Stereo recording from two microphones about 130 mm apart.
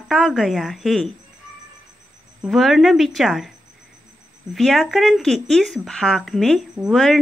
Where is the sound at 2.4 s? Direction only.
Centre (ahead or behind).